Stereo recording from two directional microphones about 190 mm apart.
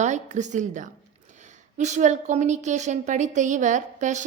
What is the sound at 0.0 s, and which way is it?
A woman's voice, 40° right (ahead or behind).